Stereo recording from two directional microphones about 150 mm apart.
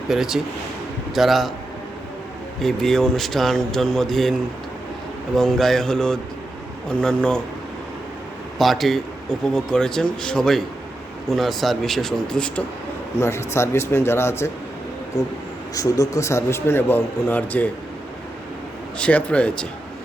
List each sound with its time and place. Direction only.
0.1 s speech: 5° right (ahead or behind)
2.6 s speech: 5° left (ahead or behind)
8.5 s speech: centre (ahead or behind)
13.1 s a man's voice: 15° left (ahead or behind)
15.7 s a man's voice: 25° left (ahead or behind)
18.9 s a man's voice: 10° left (ahead or behind)